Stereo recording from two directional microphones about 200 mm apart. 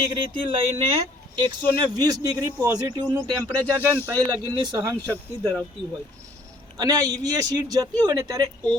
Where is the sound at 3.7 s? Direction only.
10° right (ahead or behind).